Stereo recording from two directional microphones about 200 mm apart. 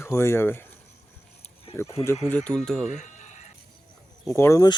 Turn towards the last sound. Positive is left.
turn(degrees=15)  # may be behind; listen again after turning